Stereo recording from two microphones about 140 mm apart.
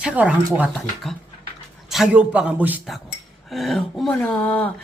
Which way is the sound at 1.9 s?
5° right (ahead or behind).